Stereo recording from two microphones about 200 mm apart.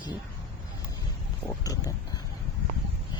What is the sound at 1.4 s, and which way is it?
Speech, 15° left (ahead or behind).